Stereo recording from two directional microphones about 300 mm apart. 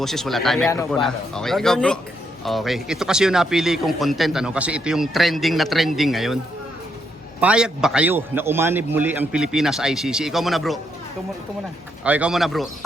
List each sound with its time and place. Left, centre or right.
0.0 s speech: centre
7.4 s speech: centre
12.0 s speech: centre